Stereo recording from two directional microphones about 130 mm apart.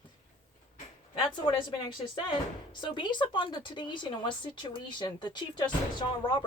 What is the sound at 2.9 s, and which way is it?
Speech, 35° left (ahead or behind).